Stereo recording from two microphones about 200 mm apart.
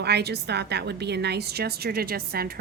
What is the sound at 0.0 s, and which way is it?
A woman's voice, 55° right (ahead or behind).